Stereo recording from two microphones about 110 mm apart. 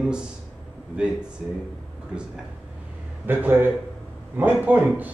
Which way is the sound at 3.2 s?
20° right (ahead or behind).